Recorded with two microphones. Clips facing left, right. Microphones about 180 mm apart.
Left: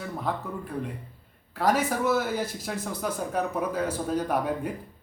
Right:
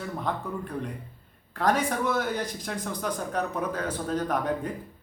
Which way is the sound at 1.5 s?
5° left (ahead or behind).